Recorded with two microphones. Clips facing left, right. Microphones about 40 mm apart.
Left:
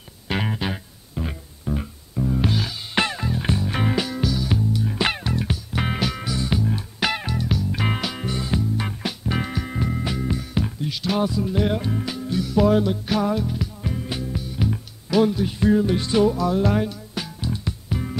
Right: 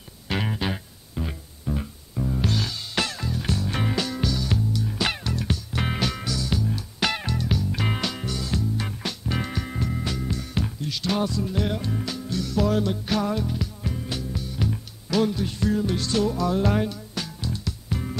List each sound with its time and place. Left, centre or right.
0.3 s music: centre
2.9 s music: left
3.6 s music: centre
6.3 s music: left
7.0 s music: centre
8.3 s music: left
16.3 s music: centre
17.1 s music: centre